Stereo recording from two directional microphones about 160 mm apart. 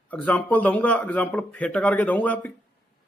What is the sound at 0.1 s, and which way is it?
A man's voice, 10° left (ahead or behind).